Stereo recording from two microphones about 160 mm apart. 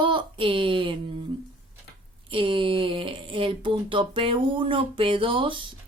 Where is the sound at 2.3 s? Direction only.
35° right (ahead or behind).